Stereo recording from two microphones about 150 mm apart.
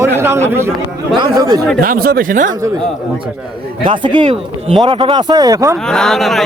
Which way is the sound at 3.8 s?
30° right (ahead or behind).